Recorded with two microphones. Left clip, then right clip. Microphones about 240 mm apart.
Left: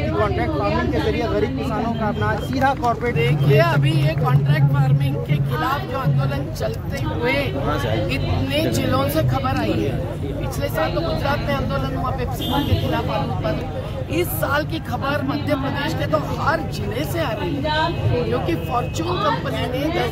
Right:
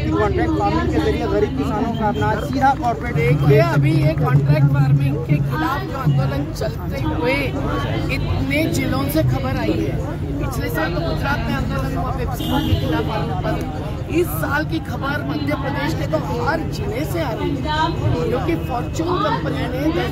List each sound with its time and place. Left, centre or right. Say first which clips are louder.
2.0 s speech: right 3 dB; centre
3.2 s speech: right 4 dB; centre
8.5 s speech: right 1 dB; centre